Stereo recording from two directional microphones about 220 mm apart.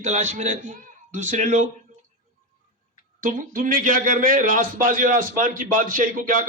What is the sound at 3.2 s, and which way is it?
A man's voice, 40° right (ahead or behind).